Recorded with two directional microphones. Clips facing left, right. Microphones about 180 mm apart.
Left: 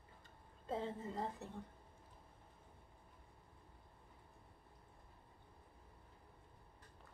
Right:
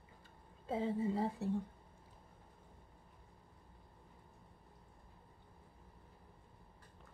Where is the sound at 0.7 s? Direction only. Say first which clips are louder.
Right 7 dB; 10° right (ahead or behind).